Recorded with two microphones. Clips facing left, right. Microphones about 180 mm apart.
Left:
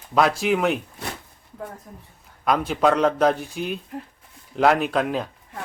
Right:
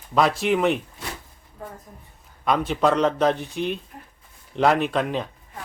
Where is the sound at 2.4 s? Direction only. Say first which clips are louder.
Left 1 dB; centre (ahead or behind).